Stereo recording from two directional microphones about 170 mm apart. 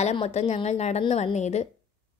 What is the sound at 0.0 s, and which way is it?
A woman's voice, 35° left (ahead or behind).